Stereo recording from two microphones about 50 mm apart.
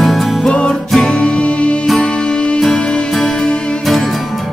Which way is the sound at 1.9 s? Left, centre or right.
Centre.